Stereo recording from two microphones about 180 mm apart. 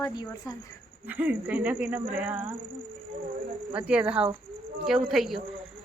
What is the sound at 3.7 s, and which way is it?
Speech, 5° right (ahead or behind).